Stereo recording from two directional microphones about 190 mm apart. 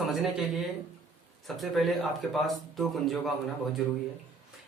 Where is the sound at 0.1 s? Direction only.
Centre (ahead or behind).